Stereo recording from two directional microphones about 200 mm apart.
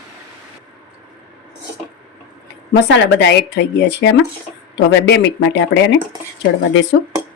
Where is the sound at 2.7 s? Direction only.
60° left (ahead or behind).